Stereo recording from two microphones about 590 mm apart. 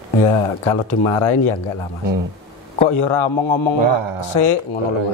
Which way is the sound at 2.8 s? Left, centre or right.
Left.